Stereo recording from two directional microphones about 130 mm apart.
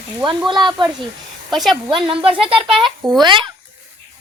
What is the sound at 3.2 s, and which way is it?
Speech, 40° right (ahead or behind).